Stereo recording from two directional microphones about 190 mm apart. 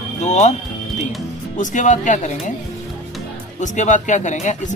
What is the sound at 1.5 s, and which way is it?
Speech, 40° left (ahead or behind).